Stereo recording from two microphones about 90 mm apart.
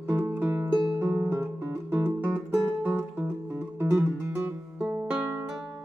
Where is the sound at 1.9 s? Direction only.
25° right (ahead or behind).